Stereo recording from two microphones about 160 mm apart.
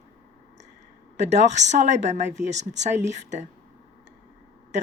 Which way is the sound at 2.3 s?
90° right.